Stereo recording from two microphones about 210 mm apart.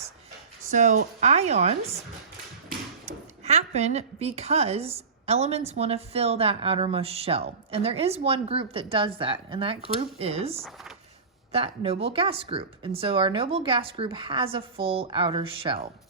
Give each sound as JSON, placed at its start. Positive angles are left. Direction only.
{"t": 0.7, "sound": "speech", "side_deg": -35}
{"t": 3.4, "sound": "a woman's voice", "side_deg": -30}